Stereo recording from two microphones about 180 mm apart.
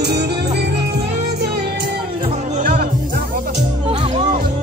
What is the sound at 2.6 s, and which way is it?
Music, 55° right (ahead or behind).